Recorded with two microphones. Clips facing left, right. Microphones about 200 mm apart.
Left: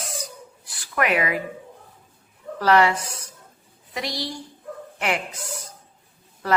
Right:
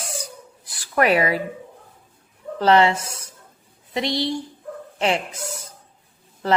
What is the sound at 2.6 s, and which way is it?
A woman's voice, 25° right (ahead or behind).